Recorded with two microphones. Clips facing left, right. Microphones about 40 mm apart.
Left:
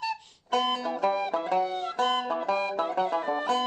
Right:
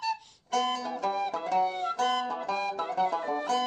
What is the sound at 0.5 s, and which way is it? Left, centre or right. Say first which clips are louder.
Music: left 2 dB; left.